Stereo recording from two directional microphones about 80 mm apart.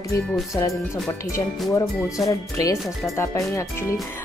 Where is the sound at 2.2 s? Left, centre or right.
Left.